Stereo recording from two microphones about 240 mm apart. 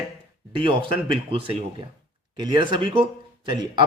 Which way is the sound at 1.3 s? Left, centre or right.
Right.